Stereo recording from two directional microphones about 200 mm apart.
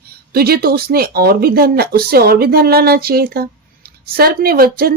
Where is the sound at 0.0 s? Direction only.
50° right (ahead or behind).